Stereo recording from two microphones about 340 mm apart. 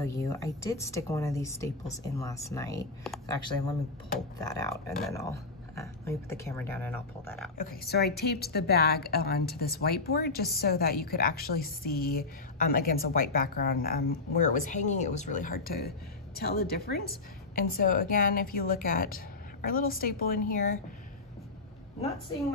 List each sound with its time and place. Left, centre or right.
0.0 s speech: centre
4.4 s speech: centre
7.5 s a woman's voice: left